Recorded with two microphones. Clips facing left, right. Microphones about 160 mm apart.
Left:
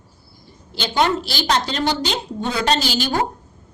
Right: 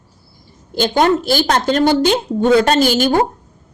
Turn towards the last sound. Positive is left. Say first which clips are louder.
# right 8 dB
turn(degrees=-50)  # may be behind; listen again after turning